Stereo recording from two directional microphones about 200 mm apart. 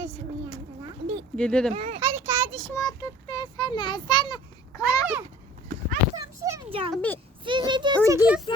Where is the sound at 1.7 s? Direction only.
30° right (ahead or behind).